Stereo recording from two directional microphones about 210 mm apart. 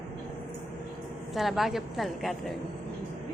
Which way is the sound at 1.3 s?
Centre (ahead or behind).